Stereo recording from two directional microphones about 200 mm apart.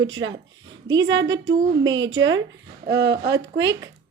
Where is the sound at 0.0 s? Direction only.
75° right (ahead or behind).